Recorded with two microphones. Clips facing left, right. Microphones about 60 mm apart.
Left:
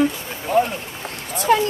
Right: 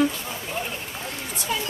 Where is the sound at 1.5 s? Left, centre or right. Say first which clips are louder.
Left 12 dB; left.